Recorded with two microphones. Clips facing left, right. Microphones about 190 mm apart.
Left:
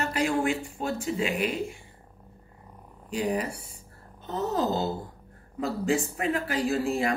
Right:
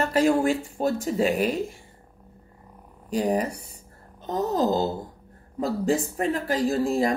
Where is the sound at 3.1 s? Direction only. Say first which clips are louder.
Right 4 dB; 40° right (ahead or behind).